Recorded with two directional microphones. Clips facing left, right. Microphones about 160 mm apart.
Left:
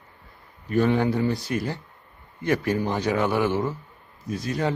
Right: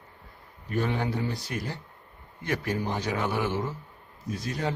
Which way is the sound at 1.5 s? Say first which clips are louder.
Left 7 dB; 70° left (ahead or behind).